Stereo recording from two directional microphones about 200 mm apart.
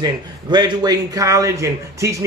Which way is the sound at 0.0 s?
20° right (ahead or behind).